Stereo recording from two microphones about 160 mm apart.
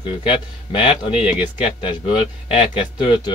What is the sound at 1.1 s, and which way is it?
Speech, 5° right (ahead or behind).